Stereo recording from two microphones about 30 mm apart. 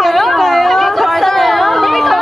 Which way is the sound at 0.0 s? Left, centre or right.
Centre.